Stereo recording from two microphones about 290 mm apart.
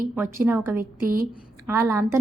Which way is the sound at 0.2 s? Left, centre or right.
Centre.